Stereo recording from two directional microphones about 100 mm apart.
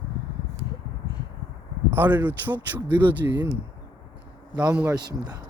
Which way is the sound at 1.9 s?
20° right (ahead or behind).